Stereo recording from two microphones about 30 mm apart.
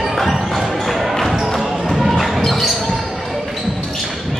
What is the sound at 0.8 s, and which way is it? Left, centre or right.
Basketball bounce, centre.